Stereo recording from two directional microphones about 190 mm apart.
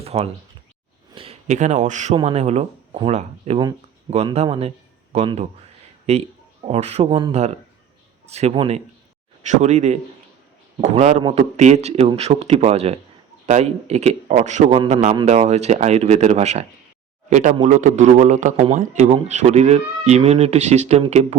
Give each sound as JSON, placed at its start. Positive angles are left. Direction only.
{"t": 0.0, "sound": "speech", "side_deg": -30}